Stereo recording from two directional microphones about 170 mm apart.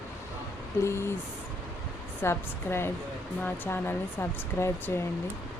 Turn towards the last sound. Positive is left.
turn(degrees=15)  # may be behind; listen again after turning